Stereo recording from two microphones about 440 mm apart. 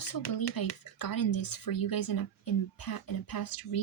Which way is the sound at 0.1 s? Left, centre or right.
Left.